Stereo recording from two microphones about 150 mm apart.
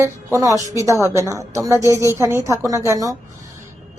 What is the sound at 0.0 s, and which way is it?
A woman's voice, 20° right (ahead or behind).